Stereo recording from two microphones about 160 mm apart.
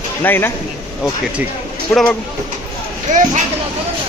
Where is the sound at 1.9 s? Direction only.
Centre (ahead or behind).